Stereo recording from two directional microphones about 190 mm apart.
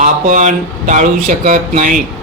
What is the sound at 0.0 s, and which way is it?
Speech, 40° right (ahead or behind).